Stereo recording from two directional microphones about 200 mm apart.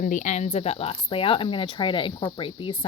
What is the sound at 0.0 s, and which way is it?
Speech, 40° left (ahead or behind).